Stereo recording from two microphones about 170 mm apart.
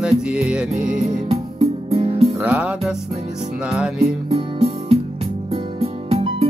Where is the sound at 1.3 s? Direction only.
35° right (ahead or behind).